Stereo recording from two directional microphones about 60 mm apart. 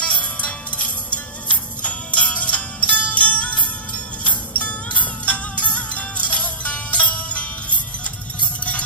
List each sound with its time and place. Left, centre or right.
0.0 s music: centre